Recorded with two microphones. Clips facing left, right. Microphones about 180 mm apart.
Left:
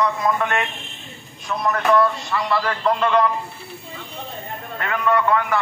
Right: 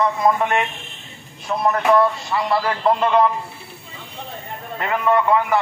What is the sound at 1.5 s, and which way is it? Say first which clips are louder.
Speech: right 3 dB; 35° right (ahead or behind).